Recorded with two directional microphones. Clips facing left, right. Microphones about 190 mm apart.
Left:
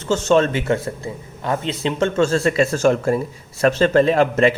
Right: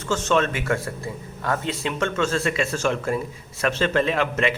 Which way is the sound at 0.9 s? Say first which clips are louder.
Left 3 dB; 20° left (ahead or behind).